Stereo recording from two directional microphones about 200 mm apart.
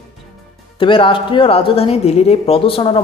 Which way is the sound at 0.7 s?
25° left (ahead or behind).